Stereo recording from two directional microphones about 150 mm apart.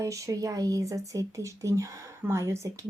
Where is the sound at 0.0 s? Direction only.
20° right (ahead or behind).